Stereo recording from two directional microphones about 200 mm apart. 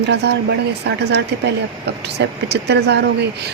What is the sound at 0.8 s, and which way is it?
Speech, 60° right (ahead or behind).